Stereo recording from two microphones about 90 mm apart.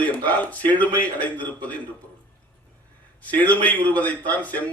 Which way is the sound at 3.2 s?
20° left (ahead or behind).